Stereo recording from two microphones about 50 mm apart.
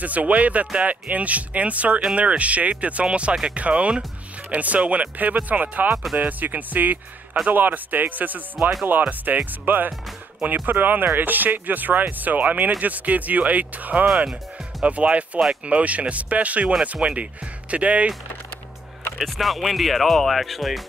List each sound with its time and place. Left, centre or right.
0.0 s speech: right
14.0 s speech: centre
14.8 s speech: right
19.1 s speech: centre